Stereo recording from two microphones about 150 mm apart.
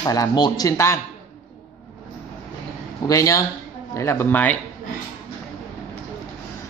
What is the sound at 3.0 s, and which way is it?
Speech, 20° left (ahead or behind).